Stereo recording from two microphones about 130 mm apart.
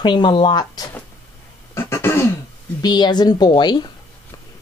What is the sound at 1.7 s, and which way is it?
Beatboxing, 20° left (ahead or behind).